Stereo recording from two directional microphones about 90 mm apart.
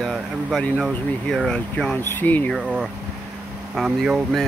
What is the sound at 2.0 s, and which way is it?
Speech, 25° left (ahead or behind).